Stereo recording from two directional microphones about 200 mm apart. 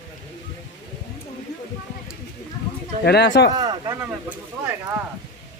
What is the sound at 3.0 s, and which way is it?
Speech, 55° left (ahead or behind).